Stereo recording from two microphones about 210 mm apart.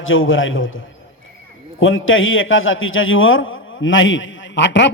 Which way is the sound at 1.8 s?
70° left (ahead or behind).